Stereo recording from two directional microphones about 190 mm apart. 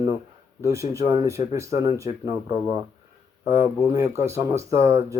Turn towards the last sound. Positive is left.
turn(degrees=-15)  # may be behind; listen again after turning